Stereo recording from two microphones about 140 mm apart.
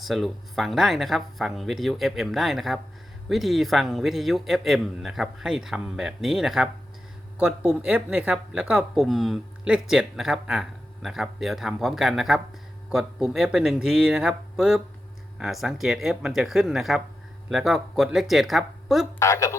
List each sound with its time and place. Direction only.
0.0 s speech: centre (ahead or behind)
19.2 s a woman's voice: 20° left (ahead or behind)